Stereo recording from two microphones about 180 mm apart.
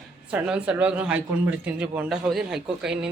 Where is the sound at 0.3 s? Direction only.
5° right (ahead or behind).